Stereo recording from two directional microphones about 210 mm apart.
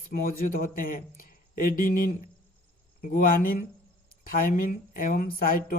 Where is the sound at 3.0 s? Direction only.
40° left (ahead or behind).